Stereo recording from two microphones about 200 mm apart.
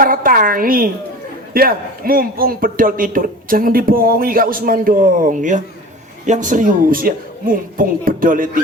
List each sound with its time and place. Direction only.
0.0 s a man's voice: 45° right (ahead or behind)